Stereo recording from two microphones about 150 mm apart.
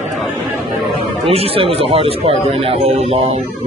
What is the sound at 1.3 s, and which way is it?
Speech, 40° right (ahead or behind).